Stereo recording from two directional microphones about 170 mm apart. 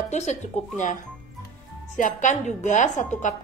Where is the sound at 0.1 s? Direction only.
45° left (ahead or behind).